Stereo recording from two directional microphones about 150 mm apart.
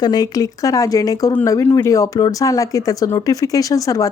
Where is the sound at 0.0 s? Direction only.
25° left (ahead or behind).